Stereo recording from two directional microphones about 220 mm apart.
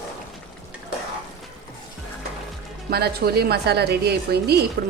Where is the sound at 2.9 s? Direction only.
45° right (ahead or behind).